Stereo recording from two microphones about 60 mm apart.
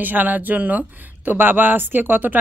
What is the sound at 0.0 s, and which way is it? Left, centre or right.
Speech, right.